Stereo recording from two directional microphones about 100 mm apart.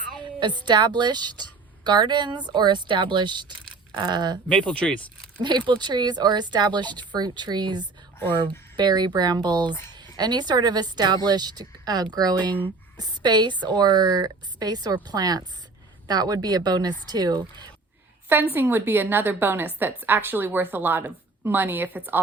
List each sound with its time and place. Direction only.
0.2 s a woman's voice: 50° right (ahead or behind)
4.4 s speech: 10° left (ahead or behind)
5.4 s a woman's voice: 50° right (ahead or behind)
18.3 s a woman's voice: 20° right (ahead or behind)